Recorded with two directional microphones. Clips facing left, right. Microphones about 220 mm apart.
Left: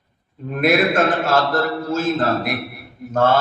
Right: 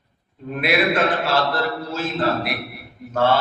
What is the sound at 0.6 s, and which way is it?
A man's voice, 45° left (ahead or behind).